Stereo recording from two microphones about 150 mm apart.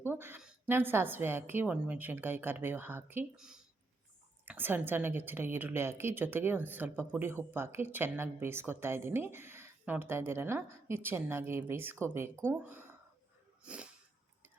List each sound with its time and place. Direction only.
0.0 s a woman's voice: 15° right (ahead or behind)
4.4 s a woman's voice: 15° right (ahead or behind)
13.7 s wheeze: 5° right (ahead or behind)